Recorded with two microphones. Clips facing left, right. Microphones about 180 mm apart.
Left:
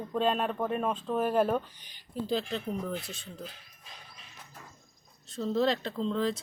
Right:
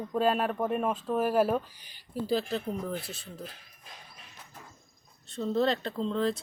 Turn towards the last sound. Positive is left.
turn(degrees=0)  # may be behind; listen again after turning